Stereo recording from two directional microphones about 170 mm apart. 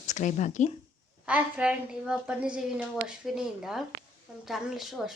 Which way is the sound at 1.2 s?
5° right (ahead or behind).